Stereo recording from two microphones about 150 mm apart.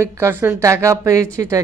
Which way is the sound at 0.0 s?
20° right (ahead or behind).